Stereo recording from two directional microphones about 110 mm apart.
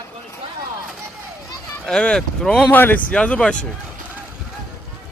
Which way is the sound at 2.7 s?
15° left (ahead or behind).